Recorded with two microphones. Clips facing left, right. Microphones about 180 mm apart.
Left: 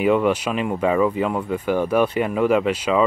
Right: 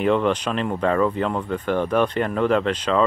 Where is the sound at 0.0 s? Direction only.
10° left (ahead or behind).